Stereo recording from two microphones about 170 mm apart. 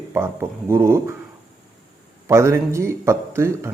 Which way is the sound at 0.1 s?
15° right (ahead or behind).